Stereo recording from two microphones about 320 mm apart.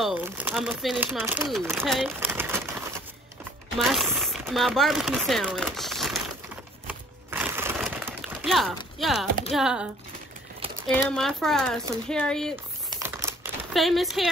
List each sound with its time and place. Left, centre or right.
0.0 s speech: centre
3.7 s speech: centre
6.9 s a sound: centre
9.5 s speech: centre
10.9 s speech: centre
12.9 s computer keyboard: centre
13.7 s speech: centre